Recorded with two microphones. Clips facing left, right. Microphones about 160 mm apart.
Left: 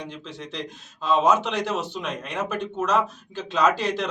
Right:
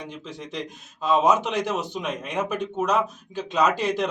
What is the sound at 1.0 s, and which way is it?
Speech, 15° right (ahead or behind).